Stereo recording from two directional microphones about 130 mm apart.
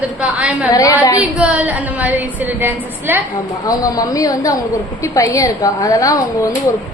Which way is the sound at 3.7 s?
25° left (ahead or behind).